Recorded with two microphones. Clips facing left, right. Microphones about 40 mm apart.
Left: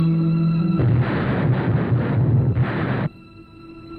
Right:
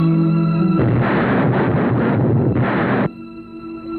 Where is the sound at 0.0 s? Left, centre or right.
Right.